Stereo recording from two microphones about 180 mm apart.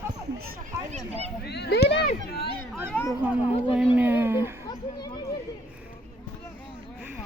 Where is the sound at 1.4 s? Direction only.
65° left (ahead or behind).